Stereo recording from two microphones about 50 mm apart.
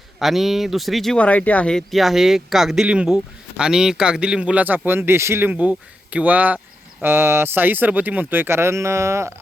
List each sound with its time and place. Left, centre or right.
0.2 s speech: centre
1.1 s speech: left
1.9 s speech: centre
2.8 s speech: centre
4.9 s speech: right
5.5 s speech: right
7.0 s speech: right